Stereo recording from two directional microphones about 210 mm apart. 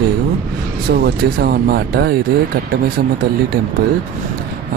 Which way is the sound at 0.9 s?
50° right (ahead or behind).